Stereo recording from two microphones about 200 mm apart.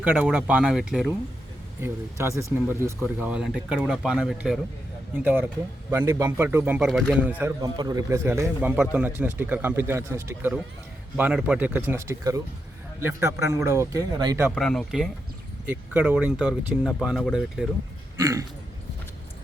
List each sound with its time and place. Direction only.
0.0 s a man's voice: 10° right (ahead or behind)
7.6 s a man's voice: 20° right (ahead or behind)
14.5 s speech: centre (ahead or behind)
18.2 s a man's voice: 15° right (ahead or behind)